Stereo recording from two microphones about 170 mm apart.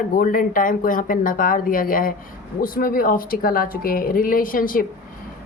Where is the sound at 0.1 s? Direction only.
55° left (ahead or behind).